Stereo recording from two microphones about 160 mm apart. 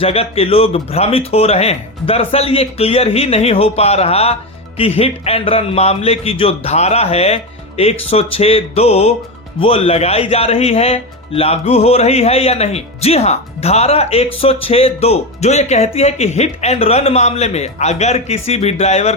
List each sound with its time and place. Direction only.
0.0 s a man's voice: 40° left (ahead or behind)